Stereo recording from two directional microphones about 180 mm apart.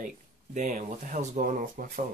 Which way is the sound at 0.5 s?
45° right (ahead or behind).